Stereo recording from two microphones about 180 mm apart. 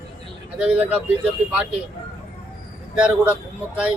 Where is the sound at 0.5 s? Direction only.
5° right (ahead or behind).